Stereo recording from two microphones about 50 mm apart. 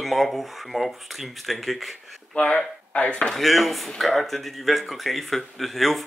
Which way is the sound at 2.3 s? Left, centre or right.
Left.